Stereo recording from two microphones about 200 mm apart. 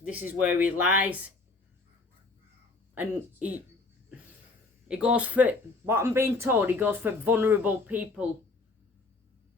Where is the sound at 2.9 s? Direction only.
10° right (ahead or behind).